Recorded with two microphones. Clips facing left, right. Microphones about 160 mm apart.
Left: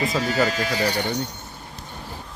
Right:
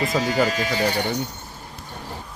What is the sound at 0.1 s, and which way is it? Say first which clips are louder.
Speech: right 1 dB; 15° right (ahead or behind).